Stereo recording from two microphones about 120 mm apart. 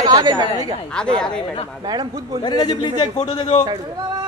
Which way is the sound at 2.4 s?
40° left (ahead or behind).